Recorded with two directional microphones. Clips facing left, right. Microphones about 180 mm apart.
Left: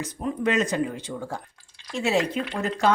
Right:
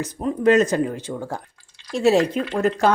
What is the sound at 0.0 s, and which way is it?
Speech, 40° right (ahead or behind).